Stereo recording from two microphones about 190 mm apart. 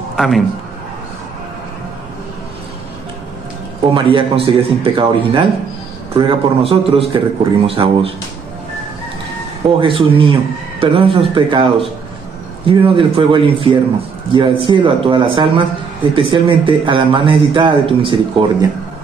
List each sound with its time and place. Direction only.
0.1 s a sound: centre (ahead or behind)
3.9 s speech: 25° right (ahead or behind)
9.8 s speech: 25° right (ahead or behind)
12.6 s speech: 30° right (ahead or behind)